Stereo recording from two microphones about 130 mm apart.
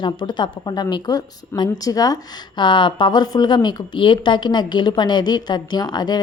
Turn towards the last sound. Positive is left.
turn(degrees=35)  # may be behind; listen again after turning